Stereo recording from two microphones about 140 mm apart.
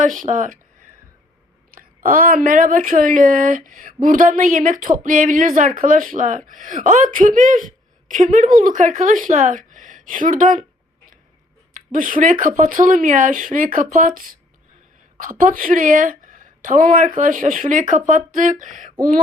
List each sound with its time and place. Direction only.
0.0 s a woman's voice: 65° right (ahead or behind)
1.7 s a woman's voice: 90° right; by 10.6 s 70° right (ahead or behind)
11.7 s a woman's voice: 75° right (ahead or behind)